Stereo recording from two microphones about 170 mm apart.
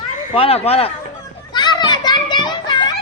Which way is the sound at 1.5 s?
25° left (ahead or behind).